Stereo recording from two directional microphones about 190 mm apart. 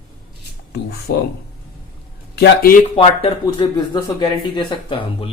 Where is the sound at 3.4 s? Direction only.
25° left (ahead or behind).